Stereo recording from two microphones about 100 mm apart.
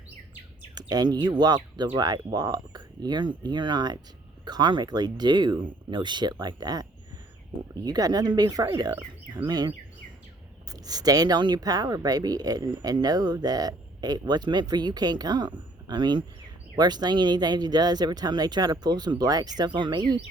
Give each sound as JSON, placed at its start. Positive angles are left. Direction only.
{"t": 0.8, "sound": "speech", "side_deg": -40}
{"t": 7.9, "sound": "speech", "side_deg": -40}